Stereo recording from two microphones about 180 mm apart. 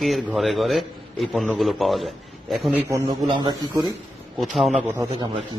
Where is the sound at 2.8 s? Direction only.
15° right (ahead or behind).